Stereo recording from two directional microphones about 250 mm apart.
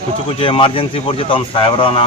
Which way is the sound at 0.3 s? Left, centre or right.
Left.